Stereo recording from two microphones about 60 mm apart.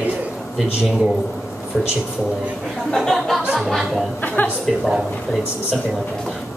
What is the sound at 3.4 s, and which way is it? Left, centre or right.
Speech, centre.